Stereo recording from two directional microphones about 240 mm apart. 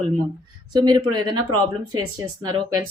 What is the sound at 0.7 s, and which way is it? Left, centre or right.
Speech, centre.